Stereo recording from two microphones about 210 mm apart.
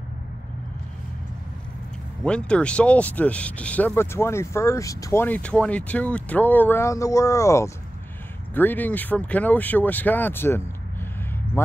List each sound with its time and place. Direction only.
2.2 s speech: 5° left (ahead or behind)